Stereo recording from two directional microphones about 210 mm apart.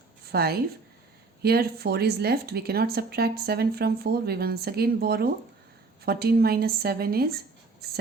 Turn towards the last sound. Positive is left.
turn(degrees=-50)  # may be behind; listen again after turning